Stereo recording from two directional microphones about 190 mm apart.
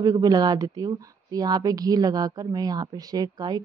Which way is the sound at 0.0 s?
20° right (ahead or behind).